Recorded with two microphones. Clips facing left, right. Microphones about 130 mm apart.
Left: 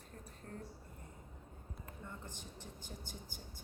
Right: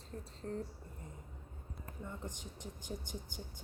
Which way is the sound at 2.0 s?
15° right (ahead or behind).